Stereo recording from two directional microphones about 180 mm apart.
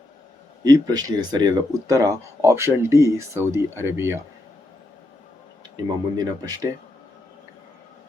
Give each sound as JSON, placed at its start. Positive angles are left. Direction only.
{"t": 0.6, "sound": "speech", "side_deg": -20}
{"t": 5.7, "sound": "speech", "side_deg": -20}